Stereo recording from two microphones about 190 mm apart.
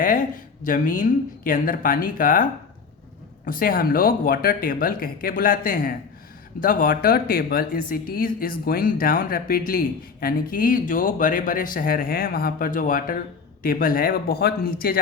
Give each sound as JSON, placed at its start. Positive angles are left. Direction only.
{"t": 0.6, "sound": "speech", "side_deg": 45}